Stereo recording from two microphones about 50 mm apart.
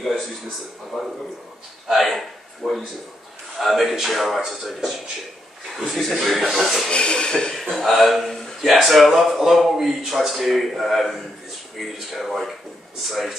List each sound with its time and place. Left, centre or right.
0.9 s speech: centre
6.9 s speech: centre
7.7 s speech: centre